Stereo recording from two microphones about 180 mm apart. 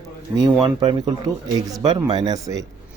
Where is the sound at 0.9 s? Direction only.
20° right (ahead or behind).